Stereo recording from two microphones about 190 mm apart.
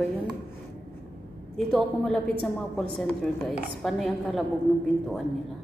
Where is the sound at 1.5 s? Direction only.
Centre (ahead or behind).